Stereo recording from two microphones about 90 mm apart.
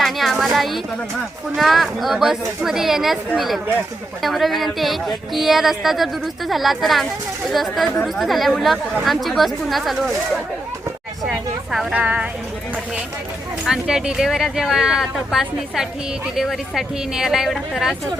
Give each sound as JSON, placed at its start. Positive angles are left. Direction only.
{"t": 0.0, "sound": "a sound", "side_deg": 0}
{"t": 1.5, "sound": "speech", "side_deg": 0}
{"t": 11.2, "sound": "speech", "side_deg": 0}
{"t": 11.9, "sound": "speech", "side_deg": -15}
{"t": 13.7, "sound": "speech", "side_deg": -5}